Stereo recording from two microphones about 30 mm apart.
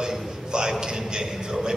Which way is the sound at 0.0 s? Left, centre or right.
Right.